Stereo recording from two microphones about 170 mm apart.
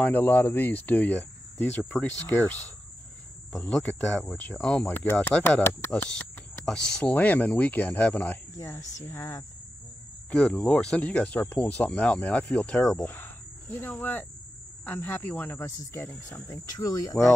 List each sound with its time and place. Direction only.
0.0 s speech: 10° left (ahead or behind)
3.7 s speech: 10° left (ahead or behind)
13.1 s cricket: 10° left (ahead or behind)
14.9 s speech: 15° left (ahead or behind)